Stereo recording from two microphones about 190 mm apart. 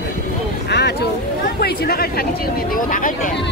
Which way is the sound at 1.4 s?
55° left (ahead or behind).